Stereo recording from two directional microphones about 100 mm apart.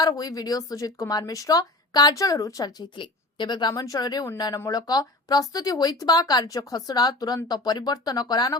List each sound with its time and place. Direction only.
0.0 s speech: 40° left (ahead or behind)
3.0 s a woman's voice: 50° left (ahead or behind)